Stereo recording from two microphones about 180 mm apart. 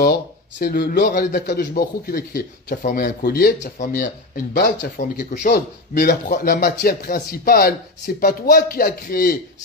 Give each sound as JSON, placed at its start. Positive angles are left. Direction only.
{"t": 0.6, "sound": "a man's voice", "side_deg": 60}
{"t": 4.6, "sound": "a man's voice", "side_deg": 60}